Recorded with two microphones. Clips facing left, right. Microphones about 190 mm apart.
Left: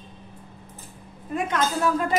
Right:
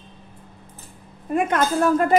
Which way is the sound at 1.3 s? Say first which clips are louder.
Right 5 dB; 55° right (ahead or behind).